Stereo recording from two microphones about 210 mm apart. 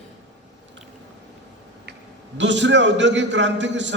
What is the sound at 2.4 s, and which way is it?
A man's voice, 60° right (ahead or behind).